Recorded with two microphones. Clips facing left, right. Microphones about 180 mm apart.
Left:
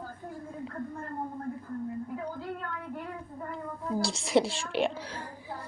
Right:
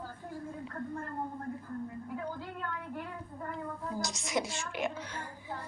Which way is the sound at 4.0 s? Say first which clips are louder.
Left 9 dB; 30° left (ahead or behind).